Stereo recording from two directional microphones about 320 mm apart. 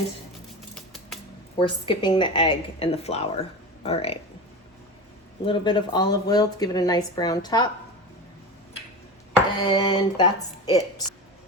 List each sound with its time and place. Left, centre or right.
0.7 s scissors: centre
1.5 s a woman's voice: centre
5.5 s a woman's voice: centre
9.6 s a woman's voice: centre